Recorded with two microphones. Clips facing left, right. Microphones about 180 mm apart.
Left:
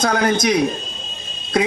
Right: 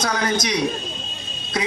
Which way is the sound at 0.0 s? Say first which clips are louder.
Left 5 dB; 55° left (ahead or behind).